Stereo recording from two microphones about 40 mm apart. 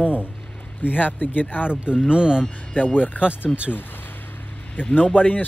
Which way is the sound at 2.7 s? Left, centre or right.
Left.